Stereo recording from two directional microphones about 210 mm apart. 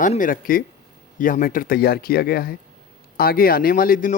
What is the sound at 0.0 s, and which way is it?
Speech, 40° left (ahead or behind).